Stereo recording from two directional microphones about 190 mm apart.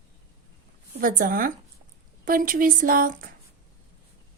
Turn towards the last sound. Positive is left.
turn(degrees=-45)  # may be behind; listen again after turning